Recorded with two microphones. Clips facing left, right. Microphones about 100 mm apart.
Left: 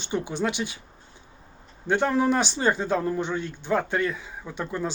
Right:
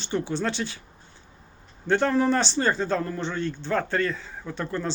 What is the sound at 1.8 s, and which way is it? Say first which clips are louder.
Speech: right 1 dB; 10° left (ahead or behind).